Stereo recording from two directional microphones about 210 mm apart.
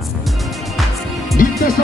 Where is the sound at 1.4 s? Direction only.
40° left (ahead or behind).